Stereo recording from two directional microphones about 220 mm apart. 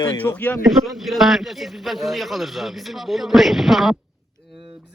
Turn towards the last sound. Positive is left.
turn(degrees=0)  # may be behind; listen again after turning